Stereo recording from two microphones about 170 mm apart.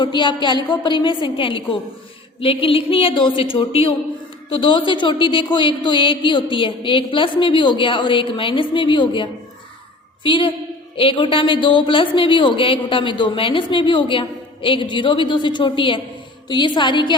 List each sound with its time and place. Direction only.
0.0 s a woman's voice: 25° left (ahead or behind)